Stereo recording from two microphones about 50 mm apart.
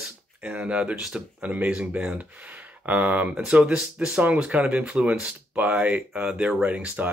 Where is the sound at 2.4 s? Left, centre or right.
Right.